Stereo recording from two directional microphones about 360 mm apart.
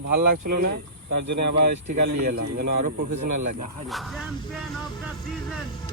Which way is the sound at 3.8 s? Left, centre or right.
Centre.